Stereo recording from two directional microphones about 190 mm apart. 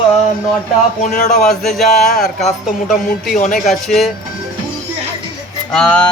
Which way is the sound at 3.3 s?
40° left (ahead or behind).